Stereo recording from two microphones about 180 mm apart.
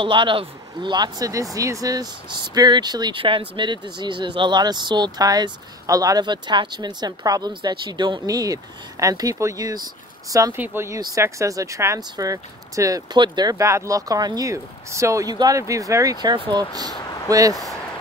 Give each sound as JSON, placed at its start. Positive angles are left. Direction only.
{"t": 0.0, "sound": "speech", "side_deg": -30}